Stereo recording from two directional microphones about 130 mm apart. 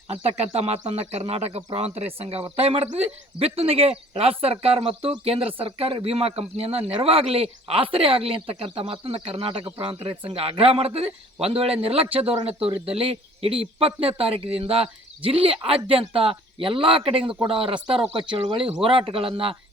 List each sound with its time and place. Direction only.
0.1 s speech: 50° right (ahead or behind)